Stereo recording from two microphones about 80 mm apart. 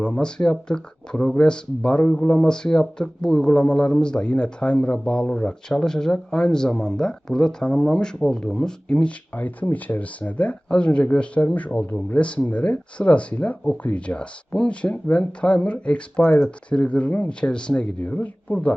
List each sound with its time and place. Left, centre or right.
0.0 s a man's voice: centre